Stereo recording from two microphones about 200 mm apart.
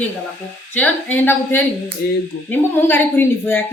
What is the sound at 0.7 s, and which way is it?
A woman's voice, 10° left (ahead or behind).